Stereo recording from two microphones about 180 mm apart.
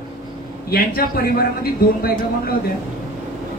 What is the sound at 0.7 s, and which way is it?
A man's voice, 55° left (ahead or behind).